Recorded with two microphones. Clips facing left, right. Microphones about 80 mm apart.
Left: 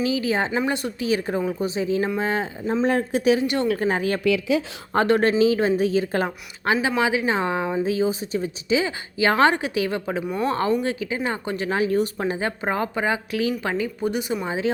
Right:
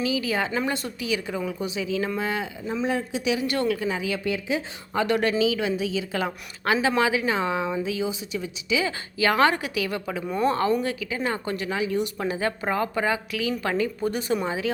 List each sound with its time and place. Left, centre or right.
0.0 s speech: left
2.8 s a woman's voice: left
3.4 s speech: left
3.8 s a woman's voice: left
5.0 s speech: left
6.6 s speech: left
10.2 s speech: centre
10.5 s speech: left
11.7 s speech: left
12.1 s speech: left